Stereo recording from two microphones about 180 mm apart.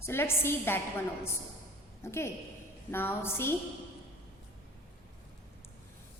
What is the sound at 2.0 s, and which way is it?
A woman's voice, 15° left (ahead or behind).